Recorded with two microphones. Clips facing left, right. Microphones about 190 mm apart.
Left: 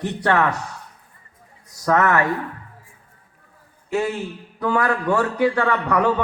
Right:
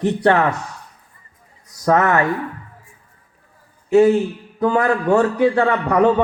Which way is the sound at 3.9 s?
20° right (ahead or behind).